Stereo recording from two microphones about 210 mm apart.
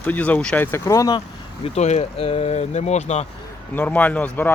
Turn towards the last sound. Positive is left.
turn(degrees=10)  # may be behind; listen again after turning